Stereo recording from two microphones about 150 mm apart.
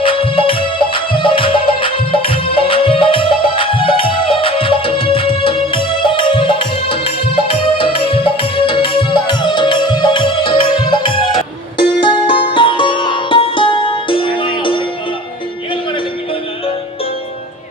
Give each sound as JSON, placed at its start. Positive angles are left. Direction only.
{"t": 0.0, "sound": "music", "side_deg": 35}